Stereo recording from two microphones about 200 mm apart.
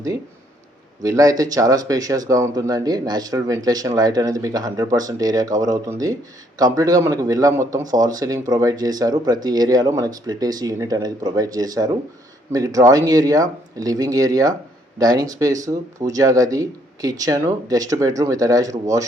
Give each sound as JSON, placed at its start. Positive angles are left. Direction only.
{"t": 1.0, "sound": "speech", "side_deg": -20}